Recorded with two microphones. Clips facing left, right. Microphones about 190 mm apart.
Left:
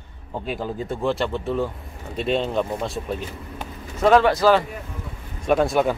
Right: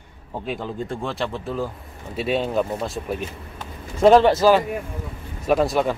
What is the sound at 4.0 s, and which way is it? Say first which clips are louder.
Speech: right 3 dB; 30° right (ahead or behind).